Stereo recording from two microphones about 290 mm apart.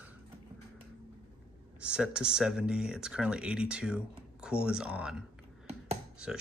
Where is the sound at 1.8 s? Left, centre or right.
Centre.